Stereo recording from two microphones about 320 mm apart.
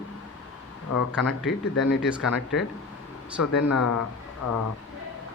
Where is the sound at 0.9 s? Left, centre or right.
Left.